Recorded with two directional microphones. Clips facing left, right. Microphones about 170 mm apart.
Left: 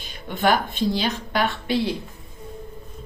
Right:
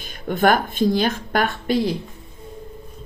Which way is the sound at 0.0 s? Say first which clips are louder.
Right 4 dB; 50° right (ahead or behind).